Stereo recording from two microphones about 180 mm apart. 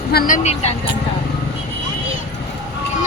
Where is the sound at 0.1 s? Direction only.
50° left (ahead or behind).